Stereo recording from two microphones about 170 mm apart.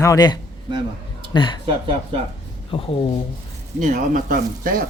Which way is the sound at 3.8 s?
50° right (ahead or behind).